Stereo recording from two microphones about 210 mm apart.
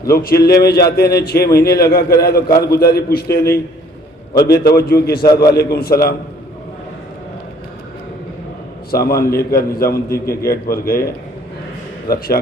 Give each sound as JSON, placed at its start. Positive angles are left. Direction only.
{"t": 0.1, "sound": "a man's voice", "side_deg": 45}
{"t": 8.9, "sound": "a man's voice", "side_deg": 45}